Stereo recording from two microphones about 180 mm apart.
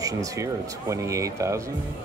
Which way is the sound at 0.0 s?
20° right (ahead or behind).